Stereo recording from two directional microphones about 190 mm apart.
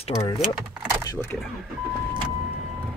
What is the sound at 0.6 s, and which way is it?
Keys jangling, 10° right (ahead or behind).